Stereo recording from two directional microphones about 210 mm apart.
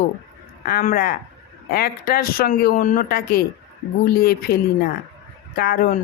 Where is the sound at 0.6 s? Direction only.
40° left (ahead or behind).